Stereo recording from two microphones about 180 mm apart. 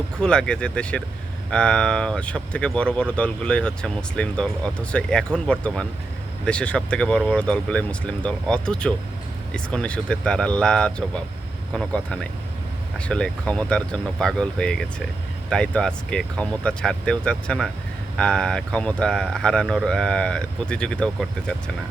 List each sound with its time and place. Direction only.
0.2 s speech: 5° left (ahead or behind)